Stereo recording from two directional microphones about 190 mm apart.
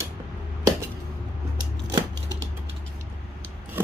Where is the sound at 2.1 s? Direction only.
65° right (ahead or behind).